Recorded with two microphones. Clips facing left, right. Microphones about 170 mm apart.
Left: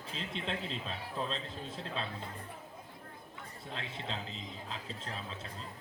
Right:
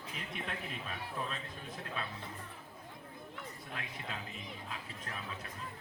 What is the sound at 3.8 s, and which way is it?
A man's voice, 25° left (ahead or behind).